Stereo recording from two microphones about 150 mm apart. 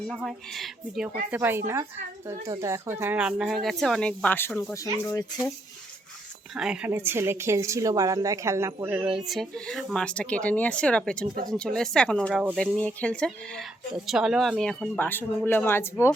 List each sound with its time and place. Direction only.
0.1 s speech: centre (ahead or behind)
1.3 s speech: 15° right (ahead or behind); by 4.5 s 15° left (ahead or behind)
6.5 s speech: 5° right (ahead or behind); by 16.1 s 15° left (ahead or behind)